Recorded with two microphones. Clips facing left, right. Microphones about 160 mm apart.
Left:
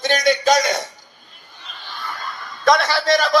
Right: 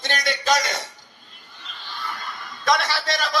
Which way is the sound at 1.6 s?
50° left (ahead or behind).